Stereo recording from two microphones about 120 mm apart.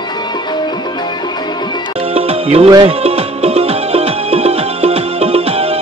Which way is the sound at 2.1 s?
55° right (ahead or behind).